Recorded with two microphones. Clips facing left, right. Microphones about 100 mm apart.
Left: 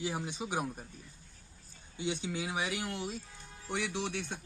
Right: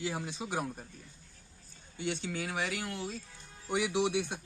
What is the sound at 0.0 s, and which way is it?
Speech, 15° left (ahead or behind).